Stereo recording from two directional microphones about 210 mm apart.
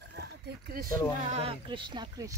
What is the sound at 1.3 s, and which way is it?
Speech, 25° right (ahead or behind).